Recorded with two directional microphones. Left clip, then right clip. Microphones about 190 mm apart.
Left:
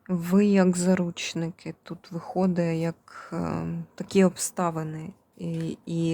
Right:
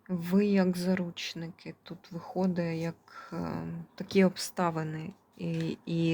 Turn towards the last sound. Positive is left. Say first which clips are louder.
# left 2 dB
turn(degrees=15)  # may be behind; listen again after turning